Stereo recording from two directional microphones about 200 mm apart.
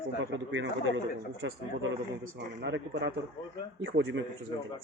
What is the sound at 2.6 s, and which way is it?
Speech, 60° right (ahead or behind).